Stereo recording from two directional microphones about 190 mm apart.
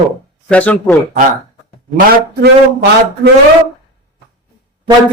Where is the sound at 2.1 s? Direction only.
60° right (ahead or behind).